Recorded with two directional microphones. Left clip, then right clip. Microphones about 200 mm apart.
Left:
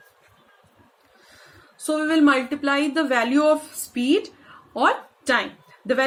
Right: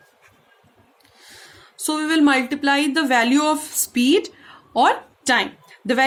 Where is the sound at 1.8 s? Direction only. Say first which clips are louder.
Right 1 dB; 50° right (ahead or behind).